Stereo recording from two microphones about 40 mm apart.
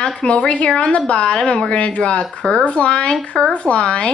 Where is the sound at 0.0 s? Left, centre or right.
Left.